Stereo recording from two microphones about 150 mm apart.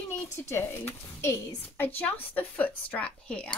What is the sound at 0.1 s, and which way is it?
A woman's voice, 15° left (ahead or behind).